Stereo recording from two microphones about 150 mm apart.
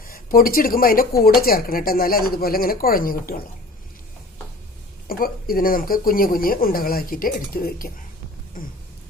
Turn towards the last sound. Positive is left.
turn(degrees=70)  # may be behind; listen again after turning